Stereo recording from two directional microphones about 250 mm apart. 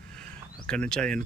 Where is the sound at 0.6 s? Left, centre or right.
Centre.